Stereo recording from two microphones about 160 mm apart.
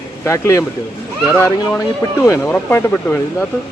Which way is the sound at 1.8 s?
20° left (ahead or behind).